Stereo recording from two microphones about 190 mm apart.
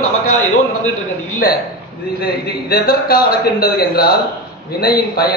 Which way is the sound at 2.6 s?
55° left (ahead or behind).